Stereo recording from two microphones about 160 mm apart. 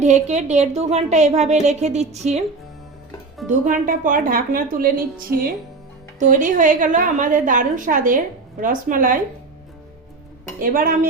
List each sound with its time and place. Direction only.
0.0 s a woman's voice: 45° right (ahead or behind)
3.5 s a woman's voice: 55° right (ahead or behind)
6.1 s a woman's voice: 50° right (ahead or behind)
10.6 s a woman's voice: 65° right (ahead or behind)